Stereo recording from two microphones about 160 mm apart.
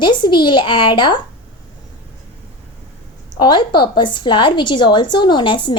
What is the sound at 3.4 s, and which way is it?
A woman's voice, 30° left (ahead or behind).